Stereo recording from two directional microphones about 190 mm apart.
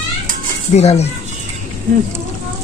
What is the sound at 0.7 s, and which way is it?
Speech, 35° left (ahead or behind).